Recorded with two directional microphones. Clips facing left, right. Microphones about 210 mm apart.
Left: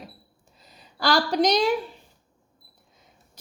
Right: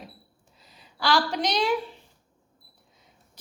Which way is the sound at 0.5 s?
40° left (ahead or behind).